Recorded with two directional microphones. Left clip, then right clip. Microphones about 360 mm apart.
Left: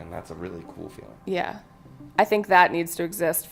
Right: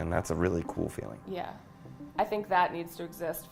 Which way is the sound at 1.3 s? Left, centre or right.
Left.